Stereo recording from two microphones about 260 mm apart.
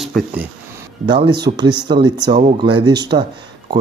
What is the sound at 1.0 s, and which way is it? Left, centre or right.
Speech, centre.